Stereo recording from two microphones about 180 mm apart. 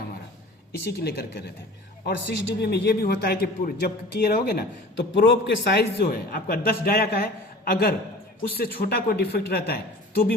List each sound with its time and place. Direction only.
0.9 s a man's voice: 60° left (ahead or behind)
2.0 s a man's voice: 85° left; by 9.7 s 60° left (ahead or behind)